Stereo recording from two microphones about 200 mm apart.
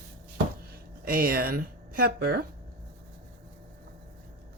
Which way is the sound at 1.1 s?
45° right (ahead or behind).